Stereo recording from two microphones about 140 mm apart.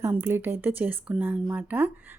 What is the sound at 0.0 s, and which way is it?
Speech, 15° right (ahead or behind).